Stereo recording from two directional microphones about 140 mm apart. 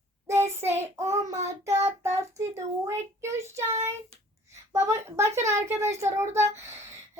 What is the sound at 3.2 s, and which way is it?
A woman's voice, 20° right (ahead or behind).